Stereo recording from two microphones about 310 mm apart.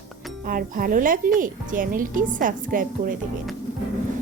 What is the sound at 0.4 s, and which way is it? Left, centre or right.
A woman's voice, right.